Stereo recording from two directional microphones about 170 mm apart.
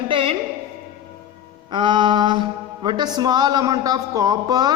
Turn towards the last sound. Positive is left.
turn(degrees=-25)  # may be behind; listen again after turning